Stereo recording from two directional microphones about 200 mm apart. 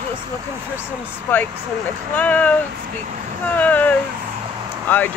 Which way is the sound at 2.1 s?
10° left (ahead or behind).